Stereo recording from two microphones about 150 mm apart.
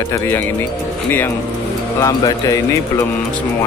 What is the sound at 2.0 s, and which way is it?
Speech, 25° left (ahead or behind).